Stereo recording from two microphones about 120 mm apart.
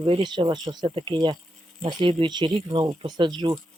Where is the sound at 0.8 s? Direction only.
45° right (ahead or behind).